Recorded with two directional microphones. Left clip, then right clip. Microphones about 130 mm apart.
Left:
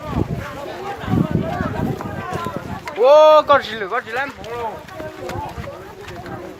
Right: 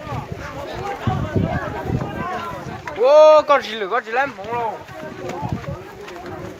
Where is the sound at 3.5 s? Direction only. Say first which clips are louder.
Left 2 dB; 20° left (ahead or behind).